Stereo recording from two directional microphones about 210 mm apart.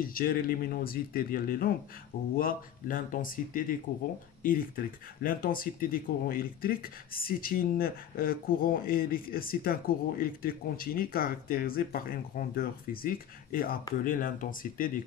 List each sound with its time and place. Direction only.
0.0 s speech: 45° left (ahead or behind)